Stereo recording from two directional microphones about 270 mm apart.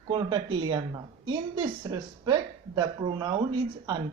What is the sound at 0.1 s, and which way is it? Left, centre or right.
A man's voice, centre.